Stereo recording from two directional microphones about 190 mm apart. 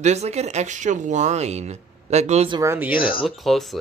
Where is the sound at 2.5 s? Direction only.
15° right (ahead or behind).